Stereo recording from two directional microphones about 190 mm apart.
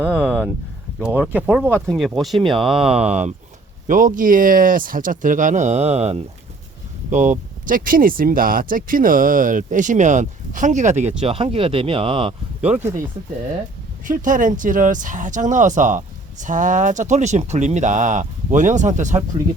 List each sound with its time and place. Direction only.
0.0 s speech: 5° right (ahead or behind)
2.9 s speech: 35° right (ahead or behind)
12.6 s speech: 10° right (ahead or behind)
14.0 s speech: 45° right (ahead or behind)